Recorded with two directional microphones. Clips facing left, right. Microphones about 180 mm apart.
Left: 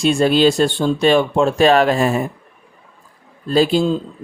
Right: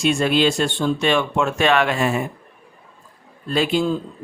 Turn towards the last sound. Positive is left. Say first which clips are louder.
# left 5 dB
turn(degrees=30)  # may be behind; listen again after turning